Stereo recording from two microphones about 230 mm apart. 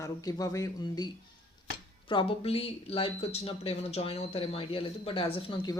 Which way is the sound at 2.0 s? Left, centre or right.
Left.